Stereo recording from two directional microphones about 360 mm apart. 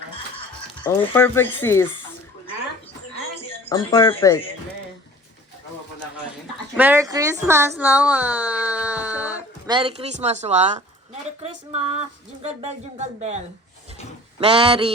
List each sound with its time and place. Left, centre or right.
0.9 s speech: centre
3.4 s speech: centre
6.7 s speech: centre
12.4 s speech: centre
14.3 s a sound: centre